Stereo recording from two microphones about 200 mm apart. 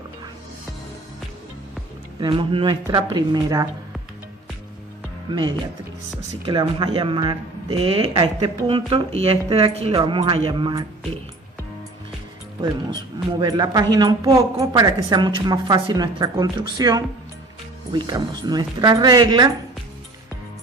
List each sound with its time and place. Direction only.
2.2 s speech: 25° right (ahead or behind)
5.3 s speech: 20° right (ahead or behind)
13.4 s speech: 20° right (ahead or behind)